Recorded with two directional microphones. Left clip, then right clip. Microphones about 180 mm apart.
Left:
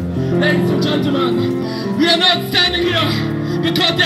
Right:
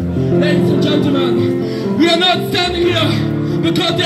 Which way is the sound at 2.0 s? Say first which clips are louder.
Right 1 dB; 10° right (ahead or behind).